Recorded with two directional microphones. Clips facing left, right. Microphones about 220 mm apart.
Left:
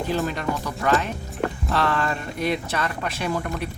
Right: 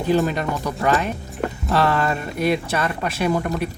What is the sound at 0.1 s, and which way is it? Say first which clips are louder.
Speech: right 7 dB; 15° right (ahead or behind).